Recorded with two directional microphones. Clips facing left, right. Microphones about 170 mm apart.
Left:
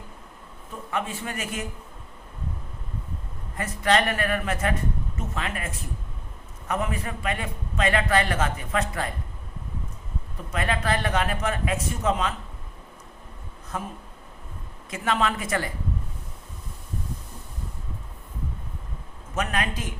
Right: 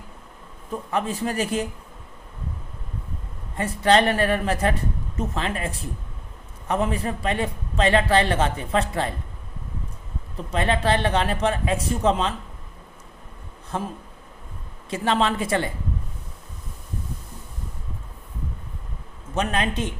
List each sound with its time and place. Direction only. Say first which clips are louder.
0.9 s speech: right 5 dB; 35° right (ahead or behind)
3.6 s a man's voice: right 4 dB; 30° right (ahead or behind)
10.5 s a man's voice: right 4 dB; 30° right (ahead or behind)
13.7 s a man's voice: right 4 dB; 30° right (ahead or behind)
19.3 s a man's voice: right 3 dB; 25° right (ahead or behind)